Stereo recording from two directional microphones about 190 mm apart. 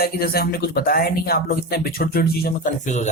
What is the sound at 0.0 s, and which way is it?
Speech, 50° left (ahead or behind).